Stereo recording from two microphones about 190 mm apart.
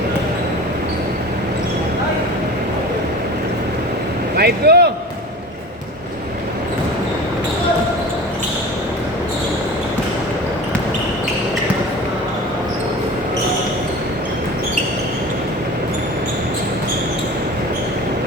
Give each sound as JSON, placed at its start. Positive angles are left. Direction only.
{"t": 4.4, "sound": "speech", "side_deg": -55}